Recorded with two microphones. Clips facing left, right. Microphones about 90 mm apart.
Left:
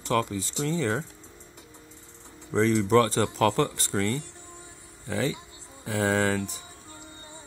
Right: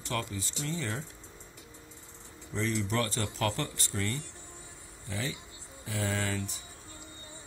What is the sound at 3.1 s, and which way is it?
Speech, 90° left.